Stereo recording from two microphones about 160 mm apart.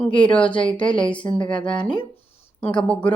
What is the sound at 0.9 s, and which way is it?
Speech, 30° left (ahead or behind).